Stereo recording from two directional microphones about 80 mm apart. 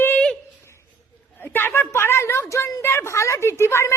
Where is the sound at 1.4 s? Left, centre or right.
Left.